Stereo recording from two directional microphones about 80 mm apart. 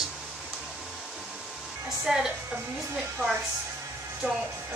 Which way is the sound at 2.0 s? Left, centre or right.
Centre.